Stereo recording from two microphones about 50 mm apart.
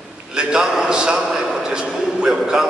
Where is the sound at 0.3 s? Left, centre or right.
Centre.